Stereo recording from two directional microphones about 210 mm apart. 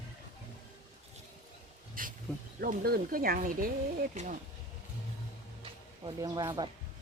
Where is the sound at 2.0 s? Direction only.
40° right (ahead or behind).